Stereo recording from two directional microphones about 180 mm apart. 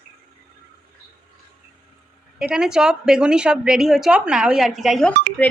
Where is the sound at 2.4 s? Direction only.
5° right (ahead or behind).